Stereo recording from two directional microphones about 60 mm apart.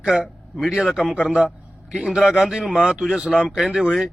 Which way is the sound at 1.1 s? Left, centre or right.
Right.